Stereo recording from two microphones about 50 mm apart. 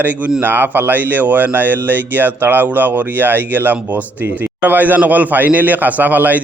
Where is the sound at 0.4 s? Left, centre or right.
Right.